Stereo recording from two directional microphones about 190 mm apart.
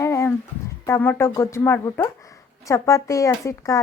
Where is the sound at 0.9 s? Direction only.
10° left (ahead or behind).